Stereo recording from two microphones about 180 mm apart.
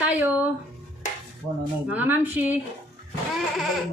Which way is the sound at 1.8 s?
10° right (ahead or behind).